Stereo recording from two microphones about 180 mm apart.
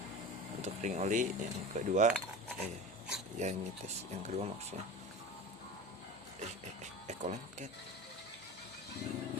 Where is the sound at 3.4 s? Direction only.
40° right (ahead or behind).